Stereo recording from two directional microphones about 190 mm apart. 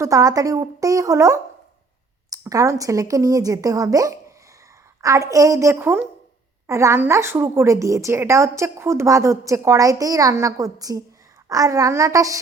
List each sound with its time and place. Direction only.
0.0 s a woman's voice: 20° right (ahead or behind)